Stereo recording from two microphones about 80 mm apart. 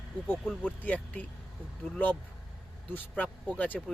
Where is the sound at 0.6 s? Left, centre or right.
Centre.